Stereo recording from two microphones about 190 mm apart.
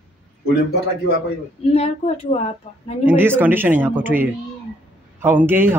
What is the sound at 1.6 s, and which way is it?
Speech, 35° left (ahead or behind).